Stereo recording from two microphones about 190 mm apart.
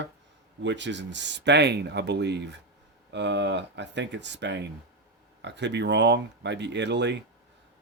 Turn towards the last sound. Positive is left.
turn(degrees=-65)  # may be behind; listen again after turning